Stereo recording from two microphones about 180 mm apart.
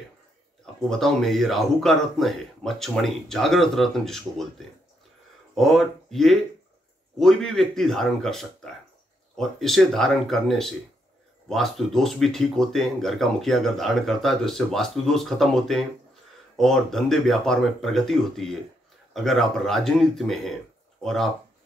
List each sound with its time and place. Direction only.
0.8 s speech: centre (ahead or behind)